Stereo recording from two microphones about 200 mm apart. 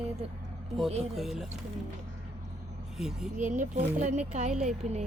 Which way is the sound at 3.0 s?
5° right (ahead or behind).